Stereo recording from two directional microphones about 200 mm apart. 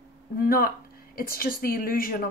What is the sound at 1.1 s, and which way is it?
A woman's voice, 45° left (ahead or behind).